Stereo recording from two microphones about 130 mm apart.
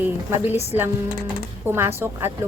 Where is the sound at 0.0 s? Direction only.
15° right (ahead or behind).